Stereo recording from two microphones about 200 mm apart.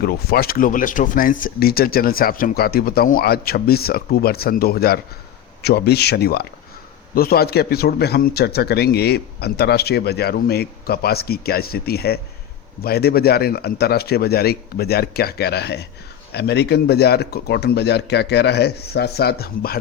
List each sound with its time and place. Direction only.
0.0 s a man's voice: 50° left (ahead or behind)